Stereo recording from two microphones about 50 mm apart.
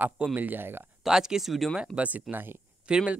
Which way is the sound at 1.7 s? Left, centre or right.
Right.